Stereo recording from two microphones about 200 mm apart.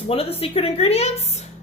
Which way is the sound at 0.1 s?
30° left (ahead or behind).